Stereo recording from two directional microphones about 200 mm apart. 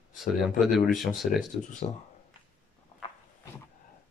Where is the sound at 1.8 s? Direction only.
30° left (ahead or behind).